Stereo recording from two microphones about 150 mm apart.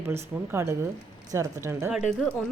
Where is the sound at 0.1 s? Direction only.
15° right (ahead or behind).